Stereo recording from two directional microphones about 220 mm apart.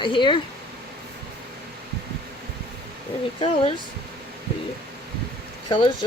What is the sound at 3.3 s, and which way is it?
Speech, 25° left (ahead or behind).